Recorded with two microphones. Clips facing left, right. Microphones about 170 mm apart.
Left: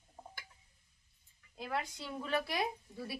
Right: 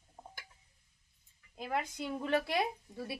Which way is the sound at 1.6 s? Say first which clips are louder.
Right 3 dB; 15° right (ahead or behind).